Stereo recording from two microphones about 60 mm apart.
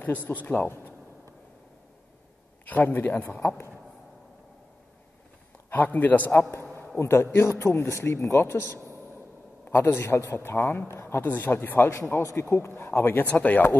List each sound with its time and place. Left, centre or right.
0.0 s a man's voice: left
2.7 s a man's voice: left
3.3 s a man's voice: left
5.7 s a man's voice: left
6.5 s a sound: left
7.0 s a man's voice: left
11.0 s a sound: left
11.2 s a man's voice: left
13.2 s a man's voice: left